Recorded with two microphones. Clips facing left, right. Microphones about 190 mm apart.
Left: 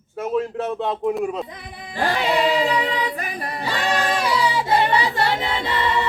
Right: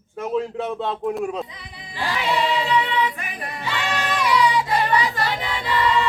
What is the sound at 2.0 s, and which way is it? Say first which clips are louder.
Music: left 5 dB; 50° left (ahead or behind).